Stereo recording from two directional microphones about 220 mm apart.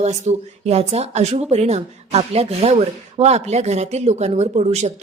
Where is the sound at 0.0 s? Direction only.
30° right (ahead or behind).